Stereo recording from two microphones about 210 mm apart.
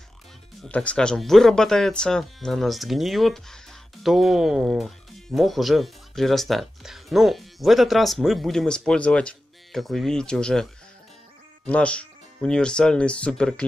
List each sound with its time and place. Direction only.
0.6 s speech: 5° left (ahead or behind)